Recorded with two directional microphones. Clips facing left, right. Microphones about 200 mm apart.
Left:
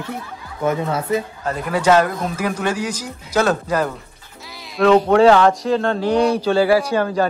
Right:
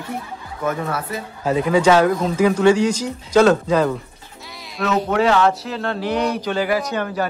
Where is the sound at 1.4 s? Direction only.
Centre (ahead or behind).